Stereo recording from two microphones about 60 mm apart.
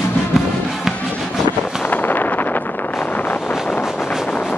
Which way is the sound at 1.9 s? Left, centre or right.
Left.